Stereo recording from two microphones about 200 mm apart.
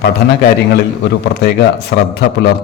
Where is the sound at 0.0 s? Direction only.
55° left (ahead or behind).